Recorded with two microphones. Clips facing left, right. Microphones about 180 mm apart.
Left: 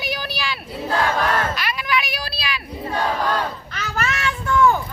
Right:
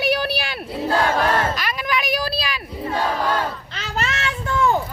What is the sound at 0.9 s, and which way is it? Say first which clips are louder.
Battle cry: right 1 dB; 30° right (ahead or behind).